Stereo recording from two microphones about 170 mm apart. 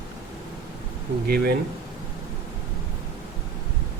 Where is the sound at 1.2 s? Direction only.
65° right (ahead or behind).